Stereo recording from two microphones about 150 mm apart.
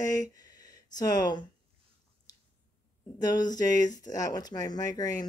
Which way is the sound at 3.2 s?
25° left (ahead or behind).